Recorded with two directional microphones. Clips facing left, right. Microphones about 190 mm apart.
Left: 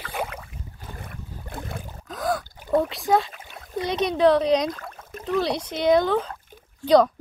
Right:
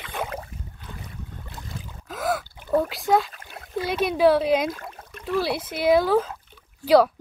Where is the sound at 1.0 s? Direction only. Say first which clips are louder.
Left 1 dB; 55° left (ahead or behind).